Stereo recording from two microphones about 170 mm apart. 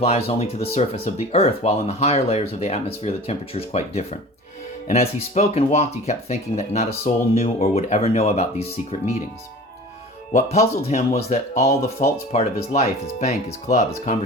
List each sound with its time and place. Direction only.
0.0 s speech: 35° left (ahead or behind)
10.3 s speech: 40° left (ahead or behind)